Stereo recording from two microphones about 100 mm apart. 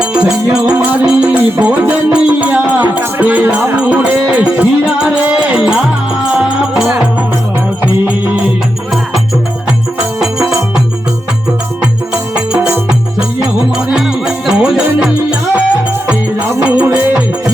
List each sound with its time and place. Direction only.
0.0 s music: 10° right (ahead or behind)
10.2 s music: 5° right (ahead or behind)
13.7 s music: 5° right (ahead or behind)